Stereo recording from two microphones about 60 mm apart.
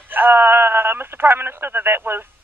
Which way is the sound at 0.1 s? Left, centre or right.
Right.